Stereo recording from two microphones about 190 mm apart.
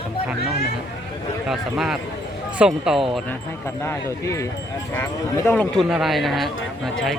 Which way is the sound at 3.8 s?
15° left (ahead or behind).